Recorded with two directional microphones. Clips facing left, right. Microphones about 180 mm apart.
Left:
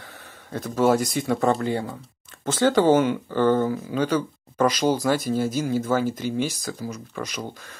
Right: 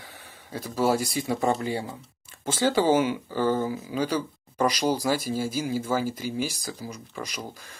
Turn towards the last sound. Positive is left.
turn(degrees=-10)  # may be behind; listen again after turning